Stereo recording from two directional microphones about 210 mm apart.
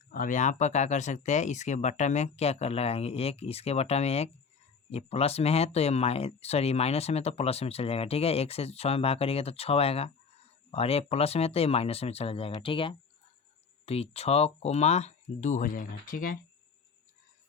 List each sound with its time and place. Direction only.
0.1 s speech: 40° left (ahead or behind)